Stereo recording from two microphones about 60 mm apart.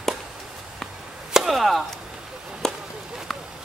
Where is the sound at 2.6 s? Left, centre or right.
Centre.